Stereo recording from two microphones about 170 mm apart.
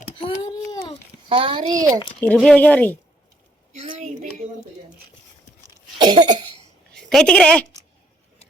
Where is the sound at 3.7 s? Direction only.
45° right (ahead or behind).